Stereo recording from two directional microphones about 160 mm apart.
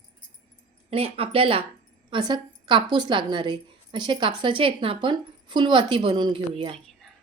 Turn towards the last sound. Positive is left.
turn(degrees=-30)  # may be behind; listen again after turning